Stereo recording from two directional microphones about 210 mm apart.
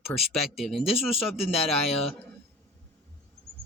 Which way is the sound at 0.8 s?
25° left (ahead or behind).